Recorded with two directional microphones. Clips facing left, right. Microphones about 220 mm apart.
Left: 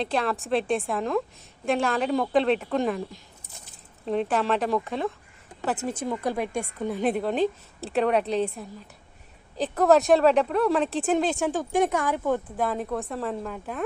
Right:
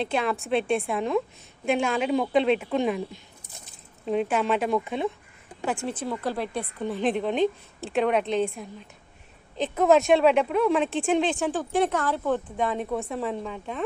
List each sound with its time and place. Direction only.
0.0 s speech: 5° right (ahead or behind)
5.9 s a woman's voice: 15° left (ahead or behind)
9.6 s speech: centre (ahead or behind)